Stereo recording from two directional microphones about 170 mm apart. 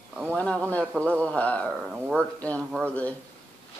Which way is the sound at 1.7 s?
5° right (ahead or behind).